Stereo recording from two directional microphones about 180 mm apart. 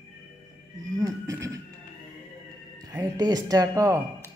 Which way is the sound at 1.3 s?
20° right (ahead or behind).